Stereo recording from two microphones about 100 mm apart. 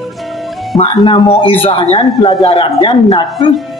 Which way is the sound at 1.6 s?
70° left (ahead or behind).